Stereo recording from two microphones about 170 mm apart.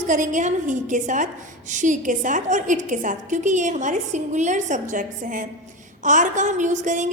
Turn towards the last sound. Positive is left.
turn(degrees=-45)  # may be behind; listen again after turning